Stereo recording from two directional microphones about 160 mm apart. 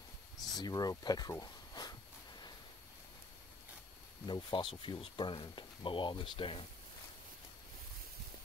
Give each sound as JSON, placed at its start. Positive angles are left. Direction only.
{"t": 0.6, "sound": "speech", "side_deg": 25}
{"t": 4.3, "sound": "speech", "side_deg": 30}